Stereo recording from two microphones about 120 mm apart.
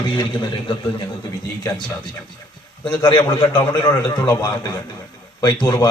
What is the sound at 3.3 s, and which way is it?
Speech, 45° left (ahead or behind).